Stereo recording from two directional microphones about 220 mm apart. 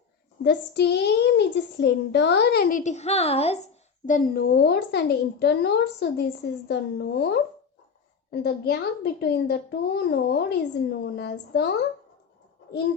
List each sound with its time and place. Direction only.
0.4 s speech: 50° left (ahead or behind)